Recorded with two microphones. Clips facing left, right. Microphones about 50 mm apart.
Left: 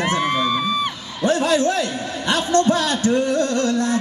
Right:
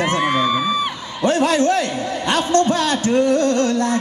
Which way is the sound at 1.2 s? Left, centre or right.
Right.